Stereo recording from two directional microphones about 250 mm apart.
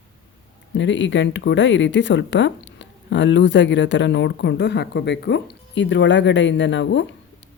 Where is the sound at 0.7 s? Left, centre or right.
Left.